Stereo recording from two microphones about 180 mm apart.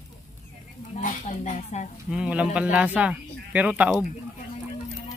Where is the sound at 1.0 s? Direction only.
45° left (ahead or behind).